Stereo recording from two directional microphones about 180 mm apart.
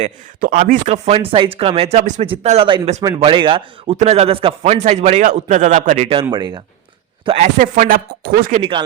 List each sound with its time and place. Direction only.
0.3 s a man's voice: 50° right (ahead or behind)
6.3 s speech: 20° right (ahead or behind)
7.3 s speech: 40° right (ahead or behind)